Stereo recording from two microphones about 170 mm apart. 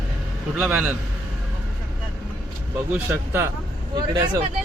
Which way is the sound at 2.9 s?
10° right (ahead or behind).